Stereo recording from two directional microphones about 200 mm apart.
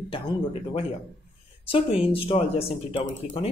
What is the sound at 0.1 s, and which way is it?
Speech, 30° left (ahead or behind).